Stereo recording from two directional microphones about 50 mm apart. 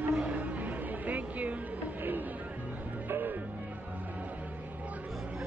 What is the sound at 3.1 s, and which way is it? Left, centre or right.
Music, right.